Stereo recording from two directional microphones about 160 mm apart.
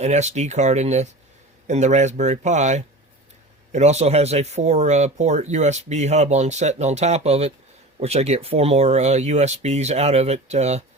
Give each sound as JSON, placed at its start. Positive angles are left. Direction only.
{"t": 0.0, "sound": "speech", "side_deg": -45}